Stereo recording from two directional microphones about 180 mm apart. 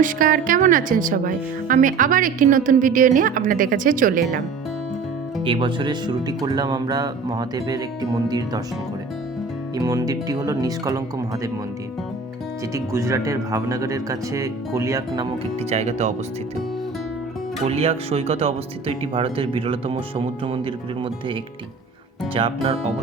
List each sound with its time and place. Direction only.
0.0 s speech: 50° right (ahead or behind)
5.5 s speech: 30° right (ahead or behind)
9.7 s speech: 20° right (ahead or behind)
12.7 s speech: 15° right (ahead or behind)
15.7 s speech: 40° right (ahead or behind)
17.7 s speech: 35° right (ahead or behind)
22.4 s speech: 30° right (ahead or behind)